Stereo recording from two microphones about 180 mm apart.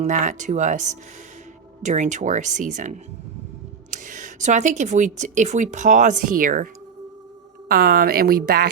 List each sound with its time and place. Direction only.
0.0 s speech: 45° right (ahead or behind)
7.7 s speech: 60° right (ahead or behind)